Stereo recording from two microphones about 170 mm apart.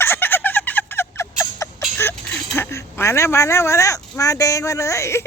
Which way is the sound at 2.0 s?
10° left (ahead or behind).